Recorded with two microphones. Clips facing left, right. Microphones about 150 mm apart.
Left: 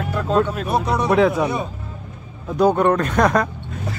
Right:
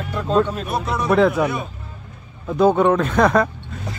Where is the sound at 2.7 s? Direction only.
Centre (ahead or behind).